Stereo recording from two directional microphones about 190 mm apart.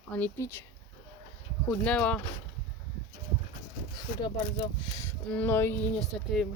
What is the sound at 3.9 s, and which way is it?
Speech, 25° left (ahead or behind).